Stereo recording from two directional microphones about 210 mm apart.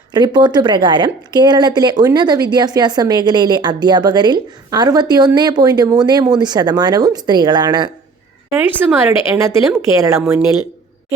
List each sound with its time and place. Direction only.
0.1 s a woman's voice: 20° right (ahead or behind)
8.4 s speech: 10° right (ahead or behind)